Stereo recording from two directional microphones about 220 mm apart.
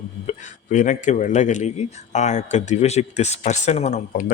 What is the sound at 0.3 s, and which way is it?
A man's voice, 35° left (ahead or behind).